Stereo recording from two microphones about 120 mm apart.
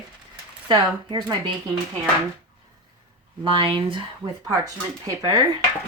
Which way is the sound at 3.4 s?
45° right (ahead or behind).